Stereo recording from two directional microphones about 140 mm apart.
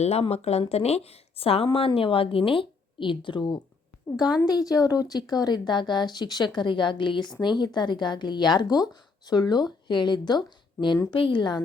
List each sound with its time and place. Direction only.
0.0 s a woman's voice: 45° left (ahead or behind)